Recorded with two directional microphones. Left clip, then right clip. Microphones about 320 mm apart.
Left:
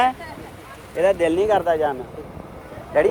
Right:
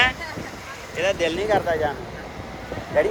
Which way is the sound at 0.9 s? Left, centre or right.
Centre.